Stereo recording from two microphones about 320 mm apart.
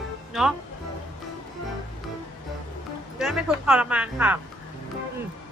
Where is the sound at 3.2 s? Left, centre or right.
Centre.